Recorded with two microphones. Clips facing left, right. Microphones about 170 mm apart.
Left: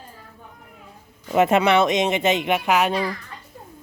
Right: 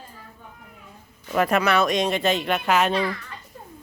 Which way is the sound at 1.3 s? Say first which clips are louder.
Left 4 dB; 25° left (ahead or behind).